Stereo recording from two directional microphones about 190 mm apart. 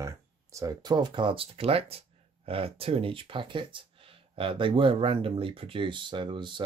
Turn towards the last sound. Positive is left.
turn(degrees=-25)  # may be behind; listen again after turning